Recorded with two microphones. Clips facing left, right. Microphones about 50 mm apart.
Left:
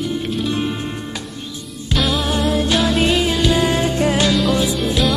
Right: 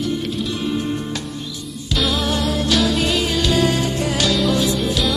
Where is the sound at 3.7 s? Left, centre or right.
Left.